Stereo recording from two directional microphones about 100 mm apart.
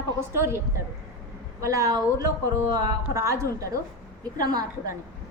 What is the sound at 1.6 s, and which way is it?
A woman's voice, 35° right (ahead or behind).